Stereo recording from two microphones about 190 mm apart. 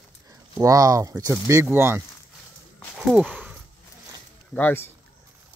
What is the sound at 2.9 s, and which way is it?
Walk, centre (ahead or behind).